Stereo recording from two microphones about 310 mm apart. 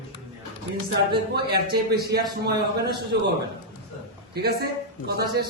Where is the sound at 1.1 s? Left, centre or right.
Right.